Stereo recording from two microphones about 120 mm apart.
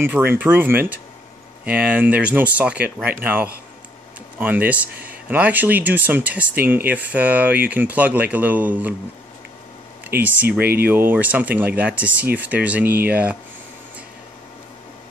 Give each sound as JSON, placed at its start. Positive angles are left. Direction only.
{"t": 0.0, "sound": "speech", "side_deg": -20}
{"t": 10.0, "sound": "speech", "side_deg": -15}